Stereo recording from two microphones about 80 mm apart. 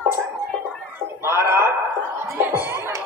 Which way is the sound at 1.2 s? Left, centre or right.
Right.